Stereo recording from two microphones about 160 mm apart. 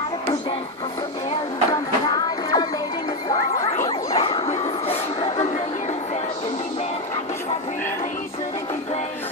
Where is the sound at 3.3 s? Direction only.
20° left (ahead or behind).